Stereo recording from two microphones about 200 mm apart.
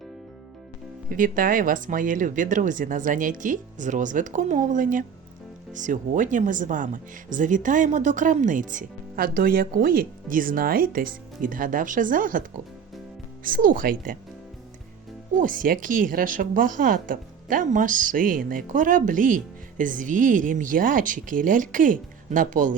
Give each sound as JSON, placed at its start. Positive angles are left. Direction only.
{"t": 1.1, "sound": "a woman's voice", "side_deg": -45}
{"t": 15.4, "sound": "a woman's voice", "side_deg": -45}